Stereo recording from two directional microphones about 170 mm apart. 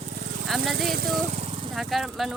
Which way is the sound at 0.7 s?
65° right (ahead or behind).